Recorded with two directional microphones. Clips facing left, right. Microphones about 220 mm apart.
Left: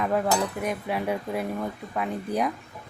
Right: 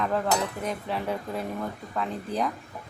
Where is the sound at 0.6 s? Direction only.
10° left (ahead or behind).